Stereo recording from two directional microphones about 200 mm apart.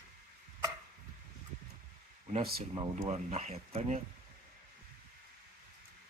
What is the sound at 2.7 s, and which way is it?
Speech, 20° right (ahead or behind).